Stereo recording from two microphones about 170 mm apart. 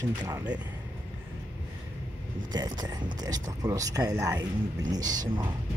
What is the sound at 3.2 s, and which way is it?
Speech, 20° right (ahead or behind).